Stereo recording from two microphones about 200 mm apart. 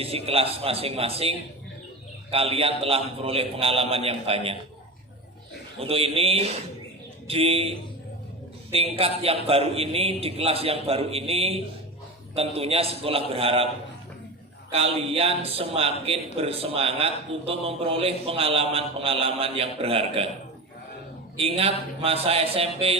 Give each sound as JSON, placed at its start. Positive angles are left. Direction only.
{"t": 0.0, "sound": "a man's voice", "side_deg": -30}
{"t": 5.8, "sound": "a man's voice", "side_deg": -30}
{"t": 14.7, "sound": "a man's voice", "side_deg": -30}
{"t": 21.3, "sound": "a man's voice", "side_deg": -30}